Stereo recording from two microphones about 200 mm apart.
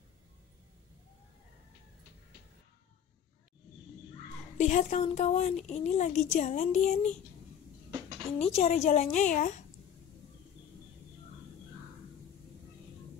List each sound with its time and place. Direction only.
4.6 s a woman's voice: 35° left (ahead or behind)
8.5 s a woman's voice: 30° left (ahead or behind)